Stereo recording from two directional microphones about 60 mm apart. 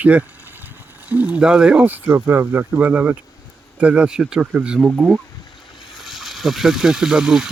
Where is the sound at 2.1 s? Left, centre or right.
Right; by 4.4 s centre.